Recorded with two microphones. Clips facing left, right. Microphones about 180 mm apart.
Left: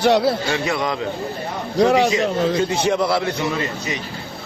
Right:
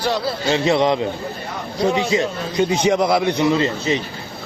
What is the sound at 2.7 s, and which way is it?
A man's voice, 15° right (ahead or behind).